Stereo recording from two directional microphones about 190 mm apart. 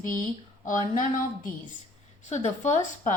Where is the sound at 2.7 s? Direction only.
40° left (ahead or behind).